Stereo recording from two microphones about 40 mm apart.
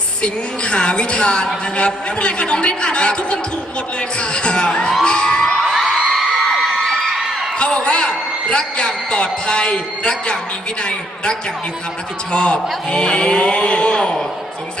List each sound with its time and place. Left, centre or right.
0.2 s speech: left
5.0 s crowd: left
5.7 s a sound: centre
7.6 s a man's voice: left
12.3 s speech: left
13.9 s a man's voice: centre